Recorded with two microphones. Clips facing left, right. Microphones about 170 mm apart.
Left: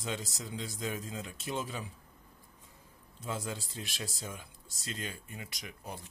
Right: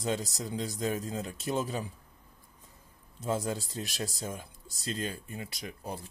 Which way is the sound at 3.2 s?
40° right (ahead or behind).